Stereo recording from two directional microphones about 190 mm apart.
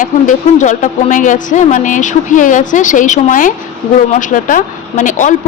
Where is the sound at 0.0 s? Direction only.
40° left (ahead or behind).